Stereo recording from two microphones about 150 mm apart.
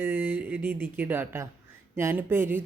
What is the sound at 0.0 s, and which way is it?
Speech, 15° right (ahead or behind).